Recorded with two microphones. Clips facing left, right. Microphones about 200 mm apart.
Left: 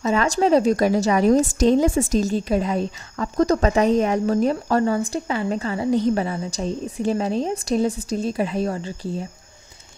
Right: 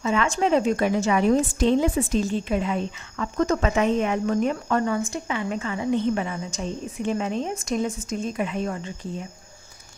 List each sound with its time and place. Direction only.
0.0 s a woman's voice: 40° left (ahead or behind)